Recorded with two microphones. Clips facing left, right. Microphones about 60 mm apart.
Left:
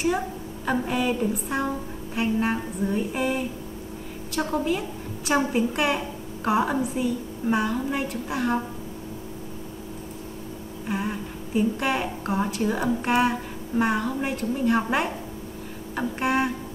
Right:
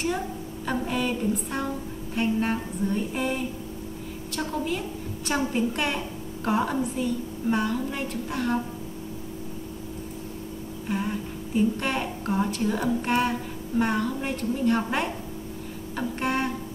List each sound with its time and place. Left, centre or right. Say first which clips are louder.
0.7 s a woman's voice: left 3 dB; centre
2.1 s a sound: left 1 dB; centre
4.3 s a woman's voice: left 4 dB; centre
10.9 s a woman's voice: even; centre